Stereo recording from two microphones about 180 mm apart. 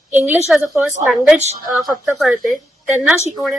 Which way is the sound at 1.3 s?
40° right (ahead or behind).